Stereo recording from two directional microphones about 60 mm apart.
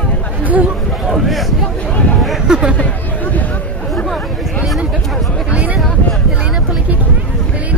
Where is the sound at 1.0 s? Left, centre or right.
Centre.